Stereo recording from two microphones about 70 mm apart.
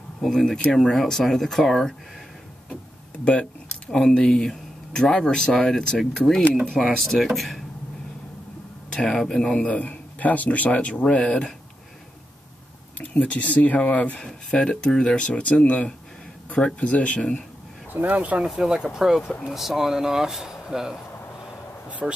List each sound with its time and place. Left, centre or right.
0.2 s speech: centre
3.3 s speech: centre
8.9 s speech: centre
13.1 s speech: centre
14.2 s speech: centre
17.9 s speech: right
18.5 s speech: centre
22.0 s speech: centre